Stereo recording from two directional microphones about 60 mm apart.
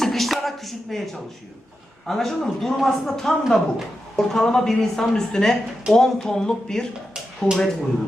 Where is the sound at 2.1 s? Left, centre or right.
Centre.